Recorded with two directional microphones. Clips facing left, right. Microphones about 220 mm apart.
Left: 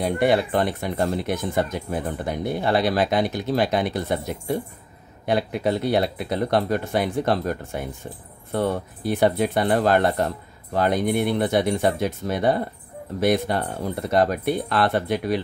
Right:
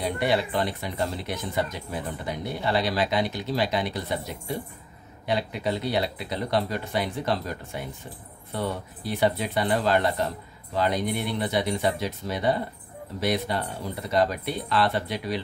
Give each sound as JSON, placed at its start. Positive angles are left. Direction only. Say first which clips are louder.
{"t": 0.0, "sound": "speech", "louder": "left 5 dB", "side_deg": 50}